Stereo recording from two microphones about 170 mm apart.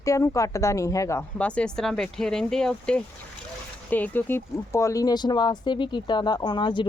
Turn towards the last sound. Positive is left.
turn(degrees=25)  # may be behind; listen again after turning